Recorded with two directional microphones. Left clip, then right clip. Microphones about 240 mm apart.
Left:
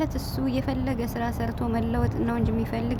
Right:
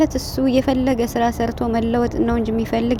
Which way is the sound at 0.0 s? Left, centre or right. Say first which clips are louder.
Right 10 dB; right.